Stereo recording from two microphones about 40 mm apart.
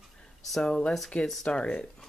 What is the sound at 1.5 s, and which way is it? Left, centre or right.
Speech, left.